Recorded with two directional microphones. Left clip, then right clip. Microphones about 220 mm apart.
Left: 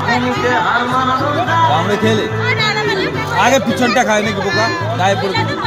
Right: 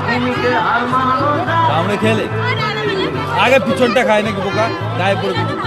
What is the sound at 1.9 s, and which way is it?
Speech, 20° right (ahead or behind).